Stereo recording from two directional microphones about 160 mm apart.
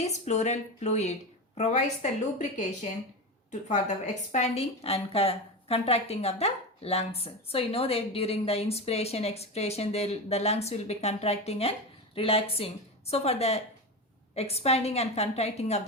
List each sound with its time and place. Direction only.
0.0 s speech: 45° left (ahead or behind)
3.7 s a woman's voice: 50° left (ahead or behind)